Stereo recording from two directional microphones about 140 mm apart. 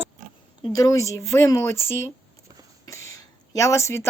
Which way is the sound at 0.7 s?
25° left (ahead or behind).